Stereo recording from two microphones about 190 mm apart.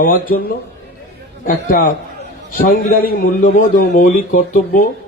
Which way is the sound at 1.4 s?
45° left (ahead or behind).